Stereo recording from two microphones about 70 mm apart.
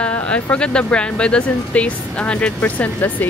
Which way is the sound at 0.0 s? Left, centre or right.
Centre.